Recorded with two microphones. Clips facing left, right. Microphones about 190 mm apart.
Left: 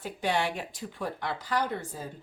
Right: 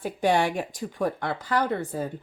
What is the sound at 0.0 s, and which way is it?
Speech, 50° right (ahead or behind).